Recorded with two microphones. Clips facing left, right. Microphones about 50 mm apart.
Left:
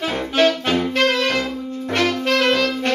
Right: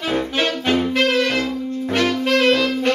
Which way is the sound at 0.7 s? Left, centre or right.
Centre.